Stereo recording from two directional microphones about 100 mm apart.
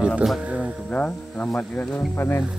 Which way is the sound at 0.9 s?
15° left (ahead or behind).